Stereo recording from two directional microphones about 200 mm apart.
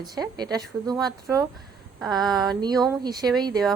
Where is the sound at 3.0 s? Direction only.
20° right (ahead or behind).